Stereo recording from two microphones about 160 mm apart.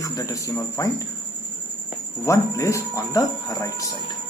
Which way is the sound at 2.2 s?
20° left (ahead or behind).